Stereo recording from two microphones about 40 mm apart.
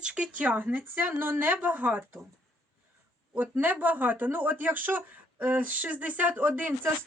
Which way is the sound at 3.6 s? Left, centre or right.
Right.